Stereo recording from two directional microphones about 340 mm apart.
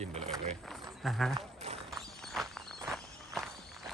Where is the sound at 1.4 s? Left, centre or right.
Centre.